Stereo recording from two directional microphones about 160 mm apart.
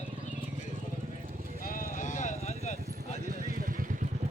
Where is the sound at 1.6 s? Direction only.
60° left (ahead or behind).